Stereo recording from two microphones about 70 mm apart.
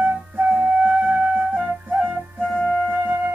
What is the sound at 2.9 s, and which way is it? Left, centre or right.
Music, right.